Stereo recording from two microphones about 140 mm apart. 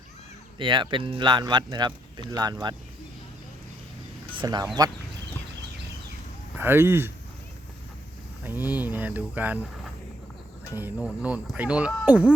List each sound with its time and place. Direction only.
0.6 s speech: 35° right (ahead or behind)
4.4 s speech: 30° right (ahead or behind)
6.6 s speech: 15° right (ahead or behind)
8.4 s speech: 15° right (ahead or behind)
10.8 s speech: 10° right (ahead or behind)